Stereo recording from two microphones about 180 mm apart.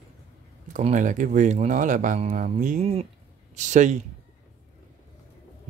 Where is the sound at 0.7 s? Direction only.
45° right (ahead or behind).